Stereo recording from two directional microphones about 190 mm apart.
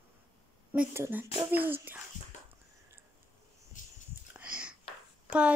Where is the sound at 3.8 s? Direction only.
45° left (ahead or behind).